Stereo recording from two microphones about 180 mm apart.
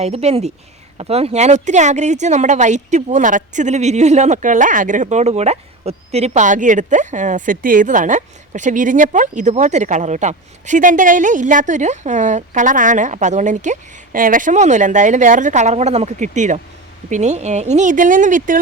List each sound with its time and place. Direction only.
0.0 s a woman's voice: 35° right (ahead or behind)